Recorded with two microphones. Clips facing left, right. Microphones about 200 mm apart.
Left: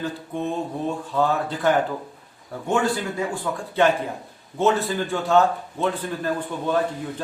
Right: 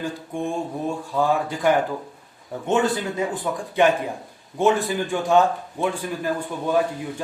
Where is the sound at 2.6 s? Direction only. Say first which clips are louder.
Right 1 dB; 20° right (ahead or behind).